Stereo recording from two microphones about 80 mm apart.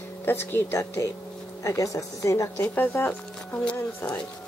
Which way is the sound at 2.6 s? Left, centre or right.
Left.